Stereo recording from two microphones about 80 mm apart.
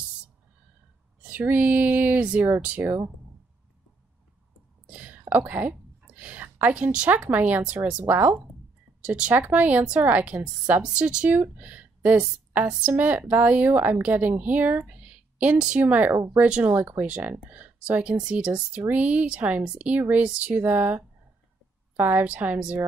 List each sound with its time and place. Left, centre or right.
1.2 s a woman's voice: right
4.8 s whispering: centre
5.3 s a woman's voice: right
14.4 s a sound: right
15.5 s speech: centre
15.8 s a woman's voice: right